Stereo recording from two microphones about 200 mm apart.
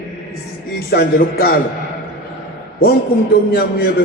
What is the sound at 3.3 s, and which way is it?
Speech, 50° left (ahead or behind).